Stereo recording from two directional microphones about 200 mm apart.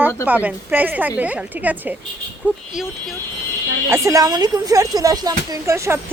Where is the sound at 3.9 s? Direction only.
15° right (ahead or behind).